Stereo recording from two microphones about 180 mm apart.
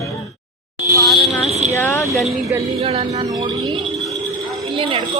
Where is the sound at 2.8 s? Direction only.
35° right (ahead or behind).